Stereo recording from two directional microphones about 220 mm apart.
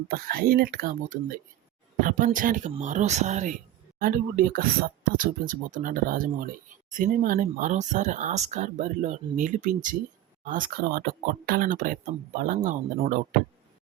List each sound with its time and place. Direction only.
0.1 s speech: 45° right (ahead or behind)